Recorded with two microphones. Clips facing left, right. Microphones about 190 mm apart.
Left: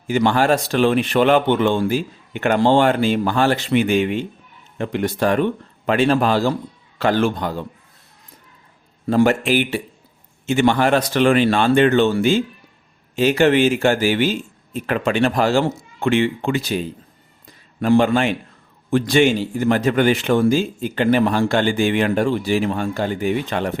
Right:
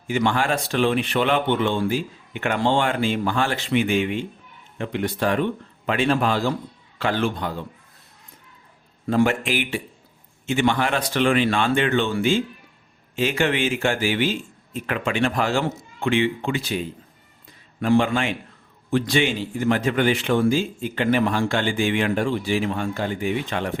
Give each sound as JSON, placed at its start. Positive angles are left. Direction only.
{"t": 0.1, "sound": "a man's voice", "side_deg": 35}
{"t": 9.0, "sound": "a man's voice", "side_deg": 35}